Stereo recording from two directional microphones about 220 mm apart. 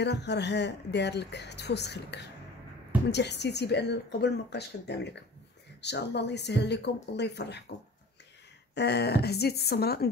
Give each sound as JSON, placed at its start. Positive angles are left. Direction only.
{"t": 0.0, "sound": "speech", "side_deg": 50}
{"t": 8.7, "sound": "speech", "side_deg": 50}